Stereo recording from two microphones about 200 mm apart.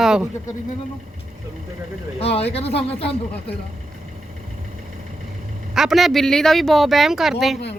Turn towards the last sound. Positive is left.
turn(degrees=0)  # may be behind; listen again after turning